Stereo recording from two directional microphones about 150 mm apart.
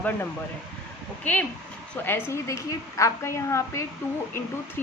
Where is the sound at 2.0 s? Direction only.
10° left (ahead or behind).